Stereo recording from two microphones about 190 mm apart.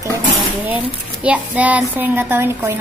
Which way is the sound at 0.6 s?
5° right (ahead or behind).